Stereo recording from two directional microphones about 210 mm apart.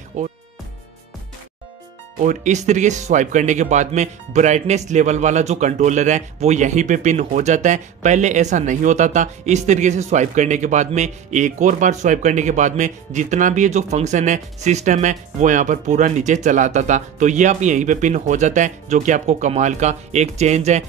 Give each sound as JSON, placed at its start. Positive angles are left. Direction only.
{"t": 0.1, "sound": "speech", "side_deg": -35}
{"t": 2.2, "sound": "speech", "side_deg": -35}